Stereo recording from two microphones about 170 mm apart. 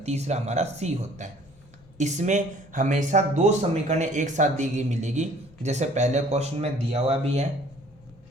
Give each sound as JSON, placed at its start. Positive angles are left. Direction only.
{"t": 0.0, "sound": "speech", "side_deg": -40}